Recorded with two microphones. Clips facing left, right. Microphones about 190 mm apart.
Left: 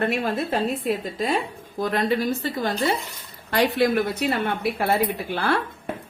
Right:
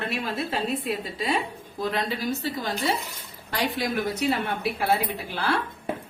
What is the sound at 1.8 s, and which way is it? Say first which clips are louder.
A woman's voice: left 5 dB; 50° left (ahead or behind).